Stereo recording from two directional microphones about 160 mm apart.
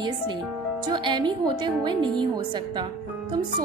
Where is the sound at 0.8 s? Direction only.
30° right (ahead or behind).